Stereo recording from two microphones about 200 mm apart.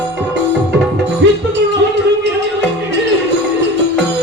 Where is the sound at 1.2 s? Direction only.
65° right (ahead or behind).